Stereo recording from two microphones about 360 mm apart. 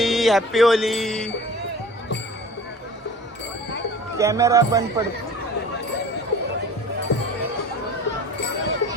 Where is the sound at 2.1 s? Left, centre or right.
Left.